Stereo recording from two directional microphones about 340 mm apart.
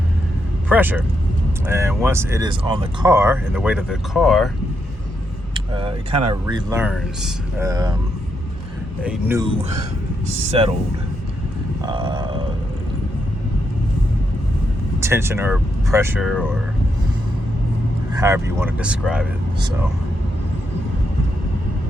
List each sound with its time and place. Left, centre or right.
0.7 s speech: centre
5.5 s speech: centre
9.0 s speech: centre
11.9 s a sound: centre
15.0 s speech: centre
18.1 s speech: centre